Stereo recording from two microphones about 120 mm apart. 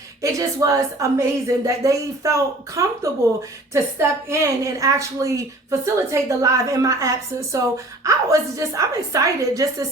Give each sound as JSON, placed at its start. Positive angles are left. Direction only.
{"t": 0.2, "sound": "a woman's voice", "side_deg": -30}